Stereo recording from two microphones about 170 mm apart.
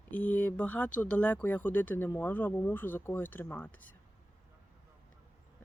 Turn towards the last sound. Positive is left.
turn(degrees=10)  # may be behind; listen again after turning